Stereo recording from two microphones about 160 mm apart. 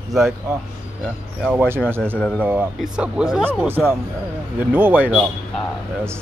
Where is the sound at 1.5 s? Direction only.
10° right (ahead or behind).